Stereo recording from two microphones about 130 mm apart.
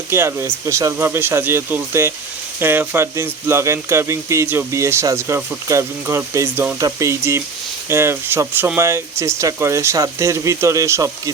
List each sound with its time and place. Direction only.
0.1 s speech: 20° right (ahead or behind)